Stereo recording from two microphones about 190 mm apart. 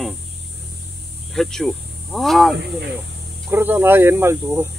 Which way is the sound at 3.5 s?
10° right (ahead or behind).